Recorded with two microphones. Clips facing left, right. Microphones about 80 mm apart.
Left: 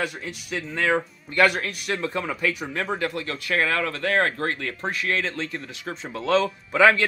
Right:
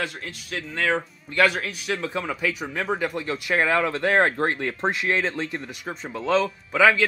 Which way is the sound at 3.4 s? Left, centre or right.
Centre.